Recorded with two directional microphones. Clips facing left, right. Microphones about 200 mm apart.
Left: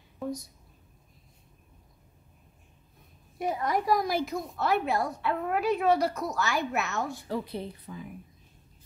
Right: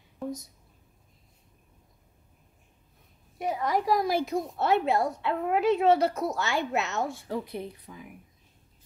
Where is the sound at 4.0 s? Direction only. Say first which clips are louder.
Right 3 dB; 30° right (ahead or behind); by 8.1 s 15° right (ahead or behind).